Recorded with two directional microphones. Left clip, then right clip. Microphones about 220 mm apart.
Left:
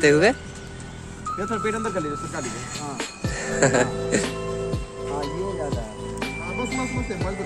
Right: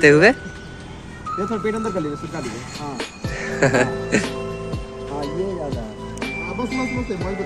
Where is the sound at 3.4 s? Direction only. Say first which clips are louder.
Right 2 dB; 15° left (ahead or behind).